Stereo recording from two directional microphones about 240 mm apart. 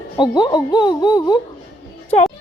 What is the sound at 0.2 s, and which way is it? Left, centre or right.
Speech, centre.